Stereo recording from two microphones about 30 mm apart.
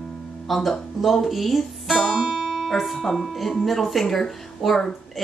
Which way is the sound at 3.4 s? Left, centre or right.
Centre.